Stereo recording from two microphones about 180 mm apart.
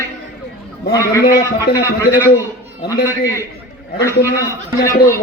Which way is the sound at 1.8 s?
15° left (ahead or behind).